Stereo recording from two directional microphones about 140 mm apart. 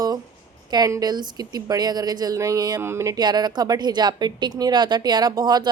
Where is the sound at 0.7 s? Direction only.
25° right (ahead or behind).